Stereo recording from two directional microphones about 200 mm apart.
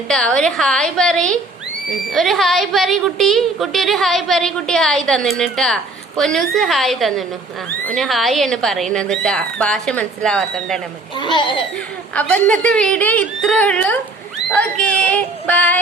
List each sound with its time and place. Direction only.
0.1 s a woman's voice: 5° left (ahead or behind)
11.2 s speech: 25° left (ahead or behind)
12.1 s a woman's voice: 5° left (ahead or behind)